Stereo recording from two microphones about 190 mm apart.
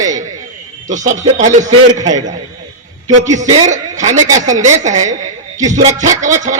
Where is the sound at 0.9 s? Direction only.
40° right (ahead or behind).